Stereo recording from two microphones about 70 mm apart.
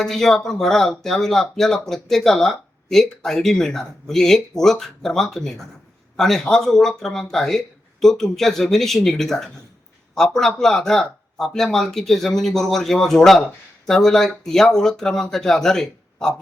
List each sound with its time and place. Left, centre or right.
0.0 s speech: centre